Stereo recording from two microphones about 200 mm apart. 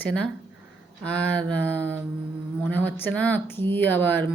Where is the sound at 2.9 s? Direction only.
10° left (ahead or behind).